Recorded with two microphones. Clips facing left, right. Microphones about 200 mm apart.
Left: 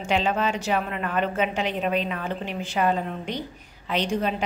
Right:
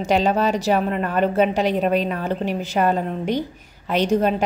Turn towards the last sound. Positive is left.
turn(degrees=-45)  # may be behind; listen again after turning